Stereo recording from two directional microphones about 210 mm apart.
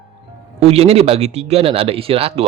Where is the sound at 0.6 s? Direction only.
30° right (ahead or behind).